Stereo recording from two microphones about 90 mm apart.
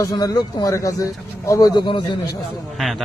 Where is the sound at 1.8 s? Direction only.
65° left (ahead or behind).